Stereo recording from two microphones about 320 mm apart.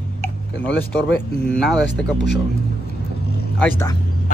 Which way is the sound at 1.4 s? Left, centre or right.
Centre.